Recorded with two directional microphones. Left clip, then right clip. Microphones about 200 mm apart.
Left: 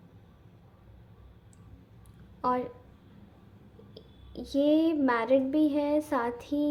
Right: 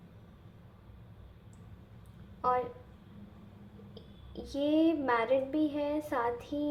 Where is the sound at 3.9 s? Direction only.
25° left (ahead or behind).